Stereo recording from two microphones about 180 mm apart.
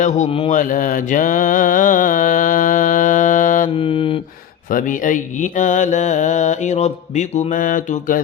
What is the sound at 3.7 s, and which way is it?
Speech, 30° left (ahead or behind).